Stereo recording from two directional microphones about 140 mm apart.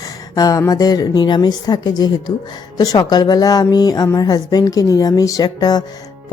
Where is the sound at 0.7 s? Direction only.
25° left (ahead or behind).